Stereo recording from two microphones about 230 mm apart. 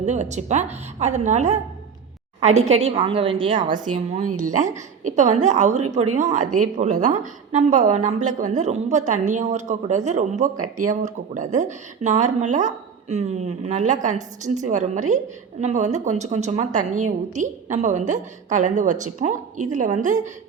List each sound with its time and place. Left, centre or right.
0.0 s a woman's voice: right